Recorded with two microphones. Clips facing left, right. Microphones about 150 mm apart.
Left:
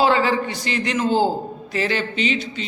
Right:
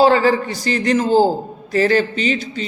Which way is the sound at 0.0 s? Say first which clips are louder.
Right 5 dB; 40° right (ahead or behind).